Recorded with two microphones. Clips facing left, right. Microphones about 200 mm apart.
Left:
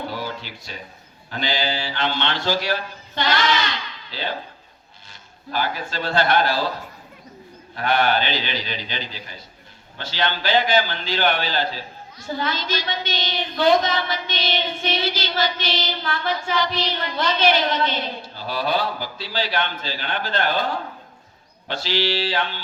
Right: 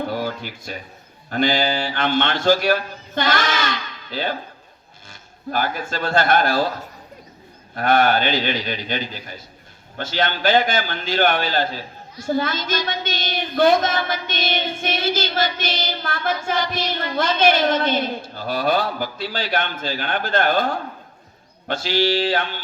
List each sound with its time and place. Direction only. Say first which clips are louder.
0.1 s a sound: right 5 dB; 50° right (ahead or behind)
1.3 s a woman's voice: right 6 dB; 50° right (ahead or behind)
5.5 s a woman's voice: right 2 dB; 50° right (ahead or behind)
7.8 s a woman's voice: right 3 dB; 50° right (ahead or behind)